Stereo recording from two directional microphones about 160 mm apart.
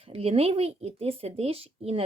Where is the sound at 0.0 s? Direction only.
40° right (ahead or behind).